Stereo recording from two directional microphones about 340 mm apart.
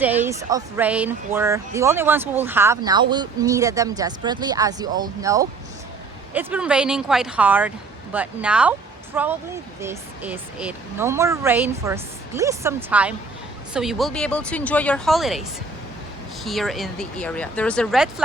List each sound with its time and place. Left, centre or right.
0.0 s speech: centre